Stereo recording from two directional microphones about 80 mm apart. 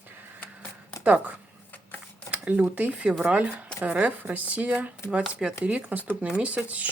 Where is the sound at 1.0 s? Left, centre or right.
Centre.